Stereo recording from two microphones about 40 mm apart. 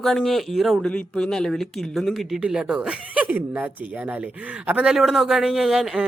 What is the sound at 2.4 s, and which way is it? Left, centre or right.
Speech, right.